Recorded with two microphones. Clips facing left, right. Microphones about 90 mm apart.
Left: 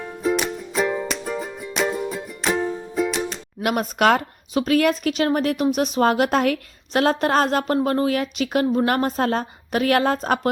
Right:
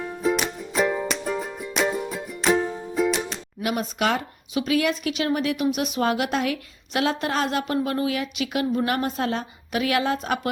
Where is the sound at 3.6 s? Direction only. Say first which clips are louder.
Left 5 dB; 55° left (ahead or behind).